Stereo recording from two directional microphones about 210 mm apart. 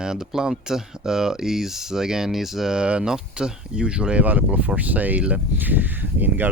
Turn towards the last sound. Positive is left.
turn(degrees=-10)  # may be behind; listen again after turning